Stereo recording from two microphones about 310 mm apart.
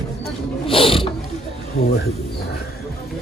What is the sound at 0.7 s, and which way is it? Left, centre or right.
Mechanisms, centre.